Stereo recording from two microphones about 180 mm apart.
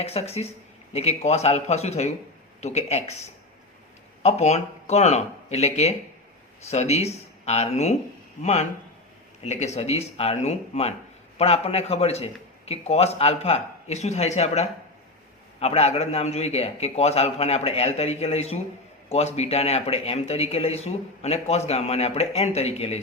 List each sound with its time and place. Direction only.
0.0 s speech: 35° left (ahead or behind)
4.2 s speech: 35° left (ahead or behind)